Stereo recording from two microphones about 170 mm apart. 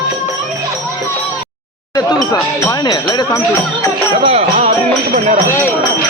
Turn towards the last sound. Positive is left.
turn(degrees=-45)  # may be behind; listen again after turning